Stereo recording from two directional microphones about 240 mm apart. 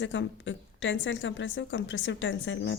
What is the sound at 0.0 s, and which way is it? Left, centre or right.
A woman's voice, left.